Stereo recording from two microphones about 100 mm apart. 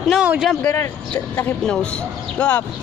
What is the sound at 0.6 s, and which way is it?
Speech, 25° left (ahead or behind).